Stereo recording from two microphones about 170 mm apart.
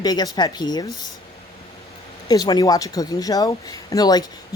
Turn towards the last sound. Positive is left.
turn(degrees=25)  # may be behind; listen again after turning